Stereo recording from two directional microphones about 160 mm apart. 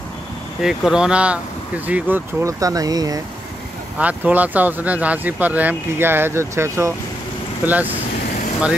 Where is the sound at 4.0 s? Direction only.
10° right (ahead or behind).